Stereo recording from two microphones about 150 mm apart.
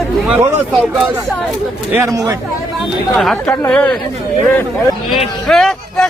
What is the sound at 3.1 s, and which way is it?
Speech, centre (ahead or behind).